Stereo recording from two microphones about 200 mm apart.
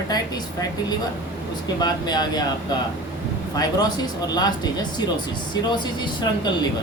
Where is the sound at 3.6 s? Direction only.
20° left (ahead or behind).